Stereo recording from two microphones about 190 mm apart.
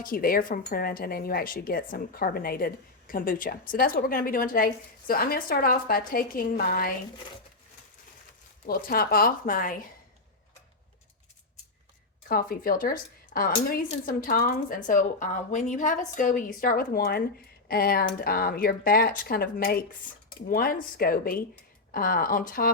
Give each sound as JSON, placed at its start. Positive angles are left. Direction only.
{"t": 0.0, "sound": "speech", "side_deg": 50}
{"t": 8.6, "sound": "speech", "side_deg": 50}
{"t": 12.3, "sound": "speech", "side_deg": 50}